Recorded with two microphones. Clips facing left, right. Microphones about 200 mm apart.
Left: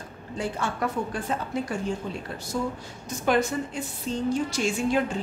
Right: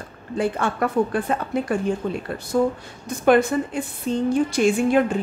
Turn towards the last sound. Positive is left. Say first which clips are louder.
# right 6 dB
turn(degrees=-55)  # may be behind; listen again after turning